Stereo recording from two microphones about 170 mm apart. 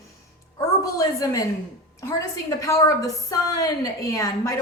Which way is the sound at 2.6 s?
20° left (ahead or behind).